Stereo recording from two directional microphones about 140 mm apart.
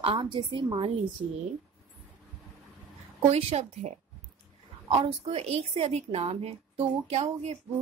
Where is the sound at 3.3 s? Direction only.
50° right (ahead or behind).